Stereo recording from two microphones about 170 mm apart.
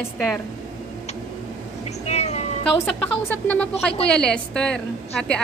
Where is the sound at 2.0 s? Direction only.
40° left (ahead or behind).